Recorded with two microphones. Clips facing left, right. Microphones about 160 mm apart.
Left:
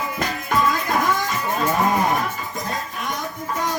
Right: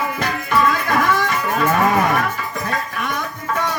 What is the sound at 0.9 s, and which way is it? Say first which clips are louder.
Livestock: right 3 dB; 70° right (ahead or behind).